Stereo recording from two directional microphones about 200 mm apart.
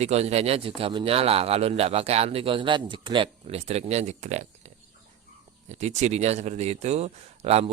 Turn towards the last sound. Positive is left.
turn(degrees=-30)  # may be behind; listen again after turning